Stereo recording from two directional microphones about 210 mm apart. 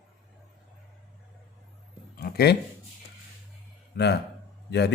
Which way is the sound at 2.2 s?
45° left (ahead or behind).